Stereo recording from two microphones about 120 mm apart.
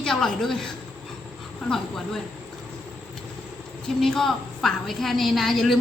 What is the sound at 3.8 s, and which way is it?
A woman's voice, 5° left (ahead or behind).